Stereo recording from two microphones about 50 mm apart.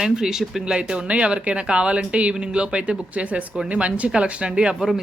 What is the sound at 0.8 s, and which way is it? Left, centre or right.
Speech, right.